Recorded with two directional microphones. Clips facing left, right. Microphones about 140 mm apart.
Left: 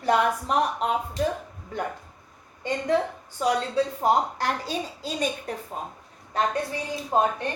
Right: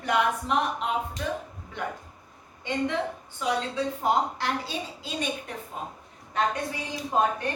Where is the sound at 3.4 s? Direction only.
40° left (ahead or behind).